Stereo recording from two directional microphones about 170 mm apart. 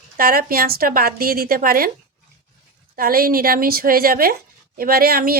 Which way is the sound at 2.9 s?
60° right (ahead or behind).